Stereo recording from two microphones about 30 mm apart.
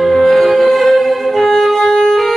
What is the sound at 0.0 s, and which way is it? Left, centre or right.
Music, centre.